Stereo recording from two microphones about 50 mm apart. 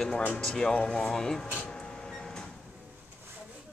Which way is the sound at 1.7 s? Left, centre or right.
Centre.